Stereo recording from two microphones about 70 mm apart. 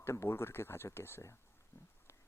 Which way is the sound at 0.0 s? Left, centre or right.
Left.